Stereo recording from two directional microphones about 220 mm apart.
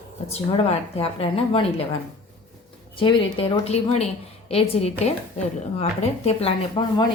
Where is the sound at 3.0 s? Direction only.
20° left (ahead or behind).